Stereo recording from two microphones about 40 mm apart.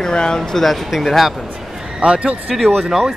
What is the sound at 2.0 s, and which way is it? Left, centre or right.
Speech, right.